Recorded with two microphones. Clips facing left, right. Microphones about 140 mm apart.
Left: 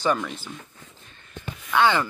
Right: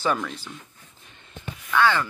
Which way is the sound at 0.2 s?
Centre (ahead or behind).